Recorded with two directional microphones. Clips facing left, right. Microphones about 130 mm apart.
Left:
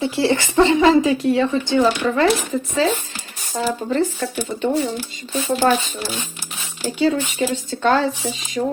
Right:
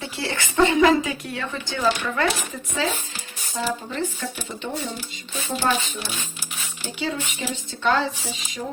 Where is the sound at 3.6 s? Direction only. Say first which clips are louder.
Left 5 dB; 45° left (ahead or behind).